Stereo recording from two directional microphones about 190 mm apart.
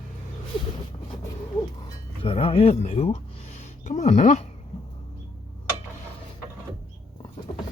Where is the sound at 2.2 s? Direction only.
30° left (ahead or behind).